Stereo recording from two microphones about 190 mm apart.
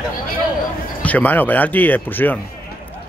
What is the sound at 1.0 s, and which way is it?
Speech, 10° left (ahead or behind).